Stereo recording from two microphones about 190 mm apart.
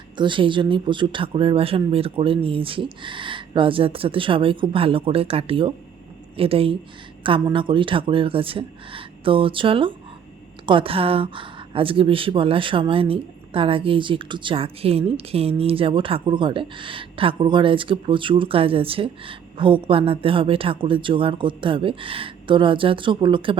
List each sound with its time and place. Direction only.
0.2 s speech: 25° right (ahead or behind)